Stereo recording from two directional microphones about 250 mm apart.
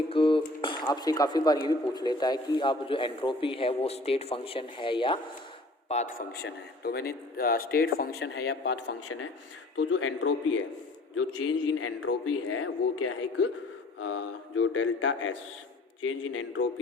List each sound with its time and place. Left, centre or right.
0.1 s speech: left
5.9 s speech: left
8.6 s mantra: left
11.1 s a man's voice: left
14.0 s mantra: left